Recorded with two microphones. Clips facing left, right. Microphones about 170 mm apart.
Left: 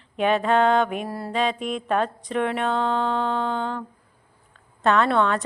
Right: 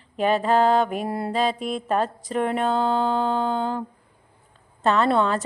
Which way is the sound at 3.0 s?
5° right (ahead or behind).